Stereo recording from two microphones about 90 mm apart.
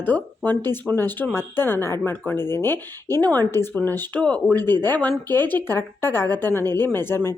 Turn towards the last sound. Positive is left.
turn(degrees=25)  # may be behind; listen again after turning